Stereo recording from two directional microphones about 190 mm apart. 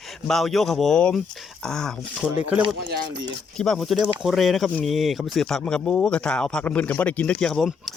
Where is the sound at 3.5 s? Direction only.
5° left (ahead or behind).